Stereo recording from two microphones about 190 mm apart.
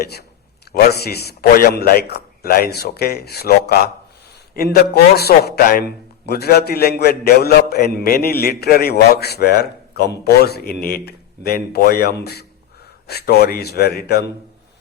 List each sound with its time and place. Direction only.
0.0 s a man's voice: 55° left (ahead or behind)